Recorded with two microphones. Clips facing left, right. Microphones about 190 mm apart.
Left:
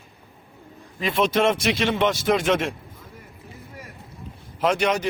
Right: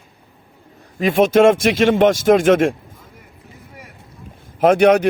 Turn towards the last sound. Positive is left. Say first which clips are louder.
# right 10 dB
turn(degrees=-55)  # may be behind; listen again after turning